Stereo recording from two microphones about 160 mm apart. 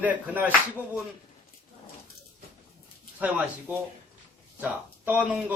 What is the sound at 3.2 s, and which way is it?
Speech, 10° right (ahead or behind).